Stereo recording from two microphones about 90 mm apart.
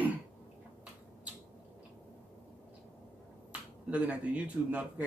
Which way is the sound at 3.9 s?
15° right (ahead or behind).